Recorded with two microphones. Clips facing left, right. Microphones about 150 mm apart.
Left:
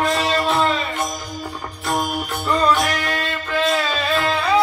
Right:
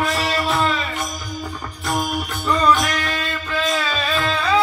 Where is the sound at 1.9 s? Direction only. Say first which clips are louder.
Left 1 dB; 20° left (ahead or behind).